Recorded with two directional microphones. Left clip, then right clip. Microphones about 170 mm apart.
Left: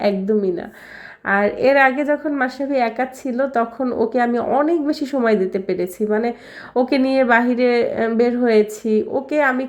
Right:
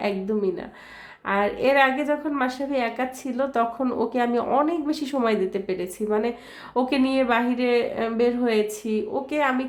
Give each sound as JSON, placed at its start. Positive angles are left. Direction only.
{"t": 0.0, "sound": "a woman's voice", "side_deg": 25}